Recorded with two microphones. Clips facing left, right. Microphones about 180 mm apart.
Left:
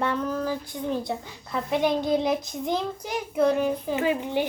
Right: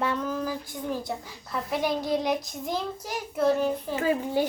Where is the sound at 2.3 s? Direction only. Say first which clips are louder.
Left 3 dB; centre (ahead or behind).